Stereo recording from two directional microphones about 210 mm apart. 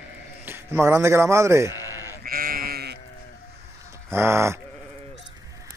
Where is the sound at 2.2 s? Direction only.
45° right (ahead or behind).